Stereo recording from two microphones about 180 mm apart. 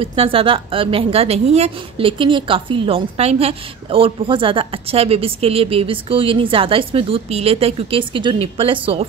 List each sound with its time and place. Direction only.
0.0 s a woman's voice: 30° right (ahead or behind)